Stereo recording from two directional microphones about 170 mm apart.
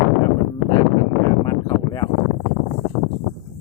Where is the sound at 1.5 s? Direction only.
20° left (ahead or behind).